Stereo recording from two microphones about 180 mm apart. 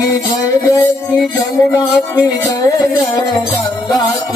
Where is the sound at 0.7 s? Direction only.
10° left (ahead or behind).